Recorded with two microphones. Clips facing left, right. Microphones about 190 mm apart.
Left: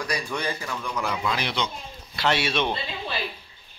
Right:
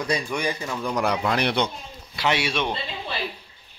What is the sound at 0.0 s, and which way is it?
Speech, 15° right (ahead or behind).